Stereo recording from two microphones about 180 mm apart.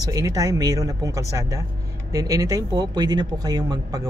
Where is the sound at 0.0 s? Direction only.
20° right (ahead or behind).